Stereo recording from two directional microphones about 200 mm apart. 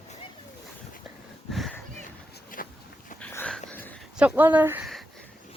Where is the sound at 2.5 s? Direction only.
45° left (ahead or behind).